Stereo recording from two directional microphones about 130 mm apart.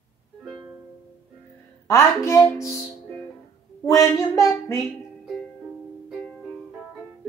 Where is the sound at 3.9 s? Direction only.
25° left (ahead or behind).